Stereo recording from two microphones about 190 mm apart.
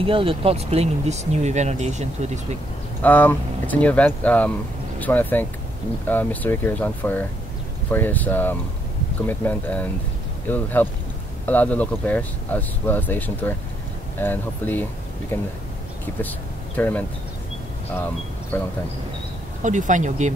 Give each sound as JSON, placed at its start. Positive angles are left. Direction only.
{"t": 0.0, "sound": "speech", "side_deg": -30}
{"t": 3.0, "sound": "speech", "side_deg": 10}
{"t": 18.5, "sound": "speech", "side_deg": 10}
{"t": 19.6, "sound": "speech", "side_deg": -40}